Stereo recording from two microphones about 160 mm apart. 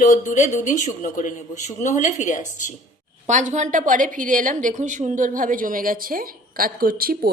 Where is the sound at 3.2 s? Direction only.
50° right (ahead or behind).